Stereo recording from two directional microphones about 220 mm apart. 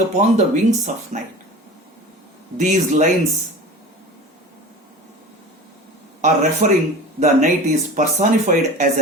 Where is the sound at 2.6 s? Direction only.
35° right (ahead or behind).